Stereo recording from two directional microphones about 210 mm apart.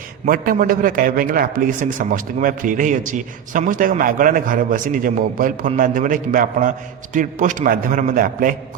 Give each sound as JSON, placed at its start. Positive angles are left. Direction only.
{"t": 0.3, "sound": "a man's voice", "side_deg": -40}